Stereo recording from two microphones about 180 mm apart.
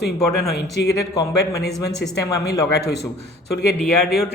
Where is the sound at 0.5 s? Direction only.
65° left (ahead or behind).